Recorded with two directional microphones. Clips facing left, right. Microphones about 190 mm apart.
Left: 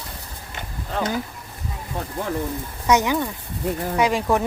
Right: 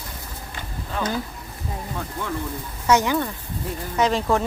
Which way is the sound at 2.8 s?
15° left (ahead or behind).